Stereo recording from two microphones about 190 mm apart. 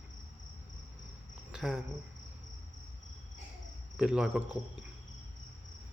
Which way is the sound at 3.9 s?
Centre (ahead or behind).